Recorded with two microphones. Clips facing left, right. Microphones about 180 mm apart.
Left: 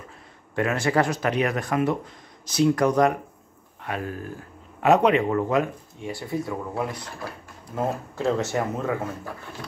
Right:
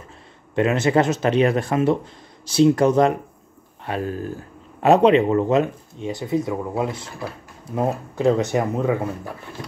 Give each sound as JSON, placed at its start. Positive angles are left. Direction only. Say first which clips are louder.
{"t": 0.6, "sound": "speech", "louder": "right 4 dB", "side_deg": -20}